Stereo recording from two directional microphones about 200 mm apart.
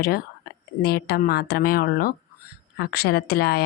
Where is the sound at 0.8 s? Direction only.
50° left (ahead or behind).